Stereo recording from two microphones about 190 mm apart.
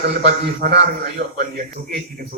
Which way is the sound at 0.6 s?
50° right (ahead or behind).